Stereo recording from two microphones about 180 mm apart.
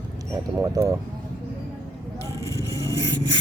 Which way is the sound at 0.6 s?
15° right (ahead or behind).